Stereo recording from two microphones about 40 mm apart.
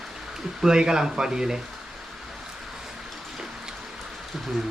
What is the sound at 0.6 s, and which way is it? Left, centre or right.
Speech, centre.